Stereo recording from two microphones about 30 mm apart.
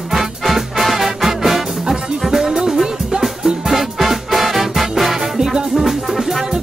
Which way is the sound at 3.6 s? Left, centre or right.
Centre.